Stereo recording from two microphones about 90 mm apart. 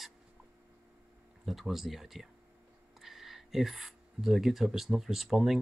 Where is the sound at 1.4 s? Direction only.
Centre (ahead or behind).